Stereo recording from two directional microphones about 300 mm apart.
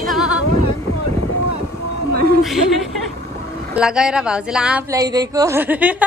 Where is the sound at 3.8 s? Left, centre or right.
Centre.